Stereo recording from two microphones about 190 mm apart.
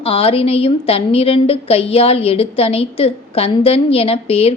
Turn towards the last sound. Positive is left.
turn(degrees=30)  # may be behind; listen again after turning